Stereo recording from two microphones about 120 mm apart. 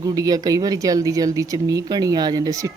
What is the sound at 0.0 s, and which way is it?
Speech, 35° right (ahead or behind).